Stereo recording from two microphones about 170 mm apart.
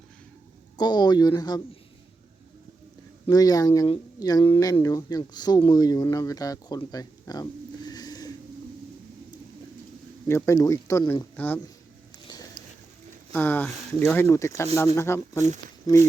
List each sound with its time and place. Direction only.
0.8 s speech: 25° left (ahead or behind)
3.2 s speech: 20° left (ahead or behind)
10.2 s speech: 15° left (ahead or behind)
13.3 s speech: 10° left (ahead or behind)